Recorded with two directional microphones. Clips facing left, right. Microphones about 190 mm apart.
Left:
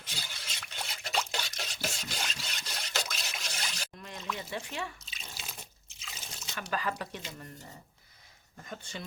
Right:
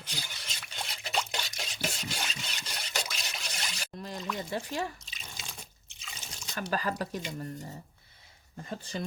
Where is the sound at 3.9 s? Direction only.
35° right (ahead or behind).